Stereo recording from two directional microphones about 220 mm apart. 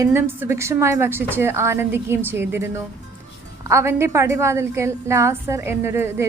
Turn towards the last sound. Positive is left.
turn(degrees=-10)  # may be behind; listen again after turning